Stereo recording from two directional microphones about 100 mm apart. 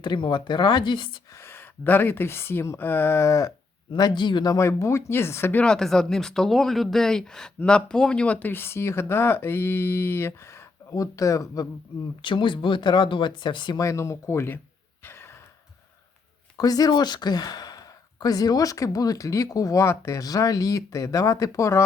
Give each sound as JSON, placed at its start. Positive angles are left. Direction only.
{"t": 0.0, "sound": "speech", "side_deg": 50}
{"t": 1.3, "sound": "speech", "side_deg": 25}
{"t": 3.9, "sound": "speech", "side_deg": 45}
{"t": 4.5, "sound": "speech", "side_deg": 30}
{"t": 5.6, "sound": "speech", "side_deg": 5}
{"t": 12.2, "sound": "speech", "side_deg": 55}
{"t": 13.7, "sound": "speech", "side_deg": 30}
{"t": 15.0, "sound": "sigh", "side_deg": 25}
{"t": 16.6, "sound": "speech", "side_deg": 40}